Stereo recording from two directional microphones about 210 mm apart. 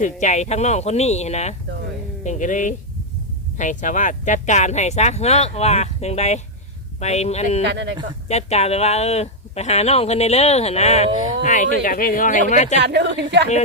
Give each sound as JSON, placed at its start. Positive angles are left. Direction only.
{"t": 0.0, "sound": "speech", "side_deg": 35}
{"t": 7.6, "sound": "a woman's voice", "side_deg": -55}
{"t": 8.3, "sound": "speech", "side_deg": 30}
{"t": 12.8, "sound": "a woman's voice", "side_deg": -55}